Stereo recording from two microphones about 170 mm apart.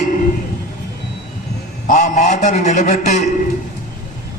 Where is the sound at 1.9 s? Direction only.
45° left (ahead or behind).